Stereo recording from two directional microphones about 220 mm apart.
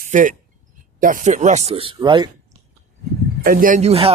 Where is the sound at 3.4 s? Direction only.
40° right (ahead or behind).